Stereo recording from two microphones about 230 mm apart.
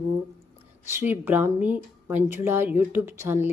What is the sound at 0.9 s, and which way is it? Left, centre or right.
A woman's voice, centre.